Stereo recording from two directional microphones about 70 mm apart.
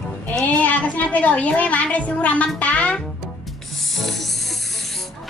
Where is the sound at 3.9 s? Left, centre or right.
Centre.